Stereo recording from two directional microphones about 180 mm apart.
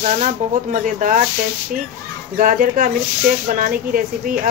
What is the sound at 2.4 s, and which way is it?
Speech, 50° right (ahead or behind).